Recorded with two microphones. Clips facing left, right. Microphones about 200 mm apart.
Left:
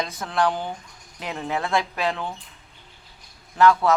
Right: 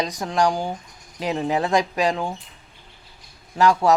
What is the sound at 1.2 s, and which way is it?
Speech, 30° right (ahead or behind).